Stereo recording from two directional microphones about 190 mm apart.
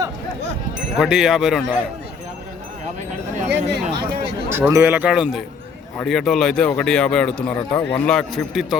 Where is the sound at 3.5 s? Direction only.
60° right (ahead or behind).